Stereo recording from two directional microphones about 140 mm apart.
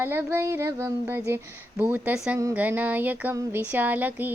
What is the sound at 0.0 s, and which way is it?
Speech, 15° right (ahead or behind).